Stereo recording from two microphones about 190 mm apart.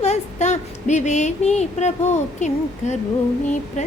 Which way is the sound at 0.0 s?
35° left (ahead or behind).